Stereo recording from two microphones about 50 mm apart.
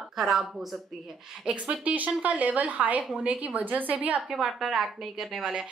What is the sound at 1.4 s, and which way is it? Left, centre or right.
A woman's voice, right.